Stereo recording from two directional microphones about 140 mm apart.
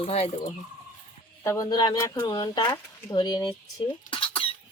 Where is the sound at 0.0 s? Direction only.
45° left (ahead or behind).